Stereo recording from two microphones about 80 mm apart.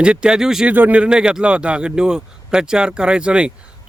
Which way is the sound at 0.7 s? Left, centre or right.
Right.